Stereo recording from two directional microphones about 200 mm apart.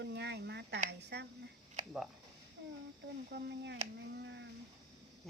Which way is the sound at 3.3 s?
55° right (ahead or behind).